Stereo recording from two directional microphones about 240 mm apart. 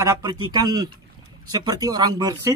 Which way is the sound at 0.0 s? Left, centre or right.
Centre.